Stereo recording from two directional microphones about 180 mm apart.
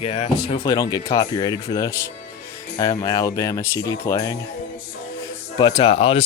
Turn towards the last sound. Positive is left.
turn(degrees=30)  # may be behind; listen again after turning